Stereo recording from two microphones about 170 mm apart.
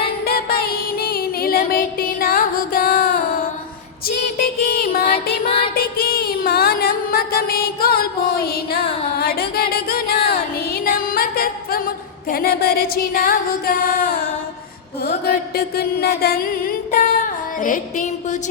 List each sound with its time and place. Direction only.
0.3 s music: 65° left (ahead or behind)
4.7 s music: 60° left (ahead or behind)
5.0 s music: 35° left (ahead or behind)
5.7 s music: 60° left (ahead or behind)
10.8 s a sound: 55° left (ahead or behind)
15.2 s music: 65° left (ahead or behind); by 18.3 s 50° left (ahead or behind)